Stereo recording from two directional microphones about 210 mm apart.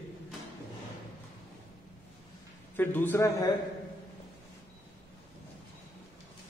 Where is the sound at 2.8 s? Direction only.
10° left (ahead or behind).